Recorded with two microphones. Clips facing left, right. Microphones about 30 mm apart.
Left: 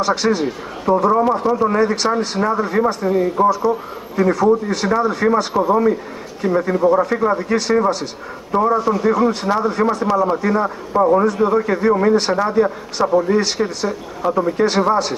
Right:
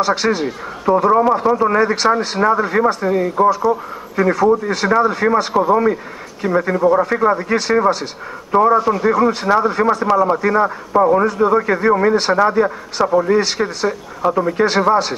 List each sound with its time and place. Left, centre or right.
0.0 s speech: centre